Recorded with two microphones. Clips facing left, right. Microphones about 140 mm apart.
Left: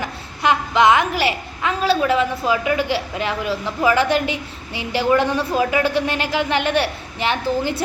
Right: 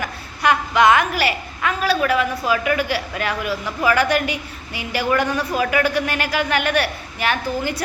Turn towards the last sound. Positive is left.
turn(degrees=25)  # may be behind; listen again after turning